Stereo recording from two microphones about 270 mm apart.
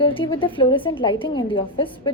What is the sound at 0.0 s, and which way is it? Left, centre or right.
A woman's voice, centre.